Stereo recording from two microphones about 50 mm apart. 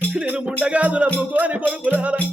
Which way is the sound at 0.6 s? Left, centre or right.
Right.